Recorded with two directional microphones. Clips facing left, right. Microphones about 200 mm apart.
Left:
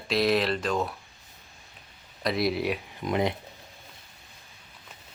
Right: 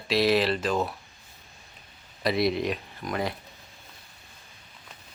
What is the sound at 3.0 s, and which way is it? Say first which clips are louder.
Speech: left 4 dB; 20° left (ahead or behind).